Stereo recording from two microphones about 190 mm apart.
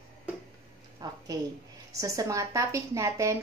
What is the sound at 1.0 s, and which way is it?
A woman's voice, 20° right (ahead or behind).